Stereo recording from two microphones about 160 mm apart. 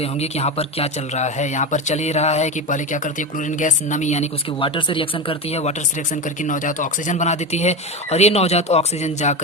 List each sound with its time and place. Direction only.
0.0 s speech: 40° left (ahead or behind)
4.6 s speech: 30° left (ahead or behind)
6.4 s speech: 55° left (ahead or behind)